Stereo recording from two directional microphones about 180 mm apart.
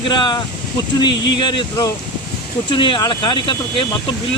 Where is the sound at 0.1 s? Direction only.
25° left (ahead or behind).